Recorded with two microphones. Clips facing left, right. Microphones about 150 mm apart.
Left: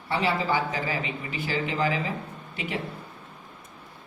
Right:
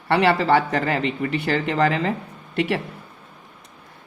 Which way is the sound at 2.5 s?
80° right.